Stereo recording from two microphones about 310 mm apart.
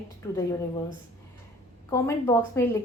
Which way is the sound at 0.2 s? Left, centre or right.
Centre.